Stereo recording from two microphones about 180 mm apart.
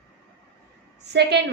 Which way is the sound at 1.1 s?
70° right (ahead or behind).